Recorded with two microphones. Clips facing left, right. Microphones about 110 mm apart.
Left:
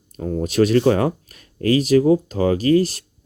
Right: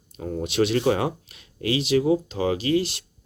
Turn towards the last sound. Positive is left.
turn(degrees=45)  # may be behind; listen again after turning